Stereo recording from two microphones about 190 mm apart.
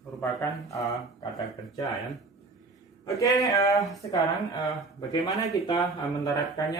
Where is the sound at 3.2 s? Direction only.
20° left (ahead or behind).